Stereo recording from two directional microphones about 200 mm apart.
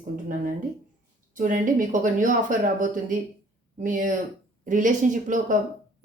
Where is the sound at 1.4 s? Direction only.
40° right (ahead or behind).